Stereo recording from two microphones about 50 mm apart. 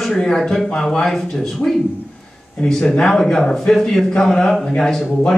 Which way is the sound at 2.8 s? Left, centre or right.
Centre.